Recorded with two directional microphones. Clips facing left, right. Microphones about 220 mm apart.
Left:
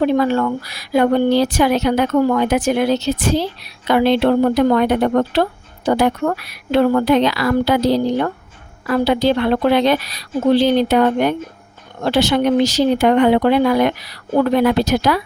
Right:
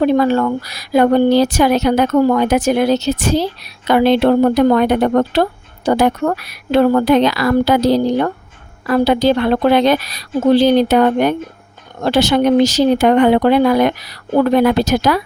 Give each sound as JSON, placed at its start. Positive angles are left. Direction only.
{"t": 0.2, "sound": "a woman's voice", "side_deg": -40}